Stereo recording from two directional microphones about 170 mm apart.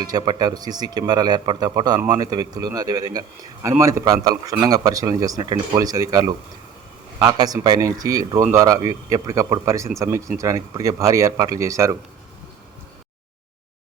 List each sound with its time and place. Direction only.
0.0 s a man's voice: 25° right (ahead or behind)